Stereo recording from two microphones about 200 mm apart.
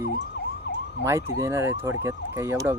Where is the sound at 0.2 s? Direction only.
60° left (ahead or behind).